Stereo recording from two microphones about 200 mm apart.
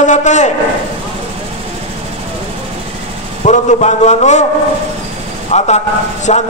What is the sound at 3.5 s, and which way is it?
Speech, 35° left (ahead or behind).